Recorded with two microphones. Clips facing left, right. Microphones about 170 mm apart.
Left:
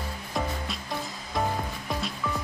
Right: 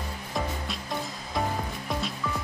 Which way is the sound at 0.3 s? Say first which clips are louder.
Left 1 dB; centre (ahead or behind).